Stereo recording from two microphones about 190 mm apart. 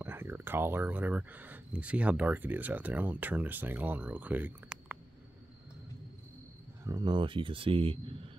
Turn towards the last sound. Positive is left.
turn(degrees=-30)  # may be behind; listen again after turning